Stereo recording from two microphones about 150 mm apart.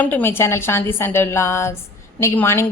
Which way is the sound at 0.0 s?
15° left (ahead or behind).